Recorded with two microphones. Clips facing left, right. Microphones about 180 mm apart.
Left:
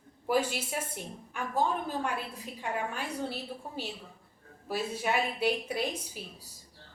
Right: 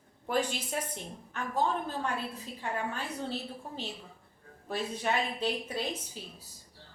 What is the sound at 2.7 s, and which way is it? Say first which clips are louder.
Speech: left 1 dB; 10° left (ahead or behind).